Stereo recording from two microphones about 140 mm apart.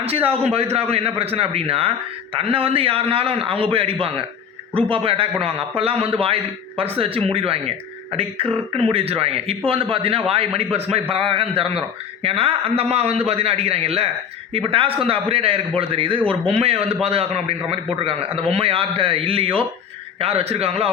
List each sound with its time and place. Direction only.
0.0 s a man's voice: 45° right (ahead or behind)